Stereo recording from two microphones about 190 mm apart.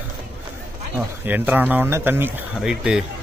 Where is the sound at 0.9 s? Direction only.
10° right (ahead or behind).